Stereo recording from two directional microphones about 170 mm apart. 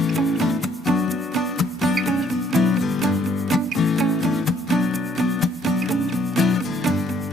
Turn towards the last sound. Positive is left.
turn(degrees=0)  # may be behind; listen again after turning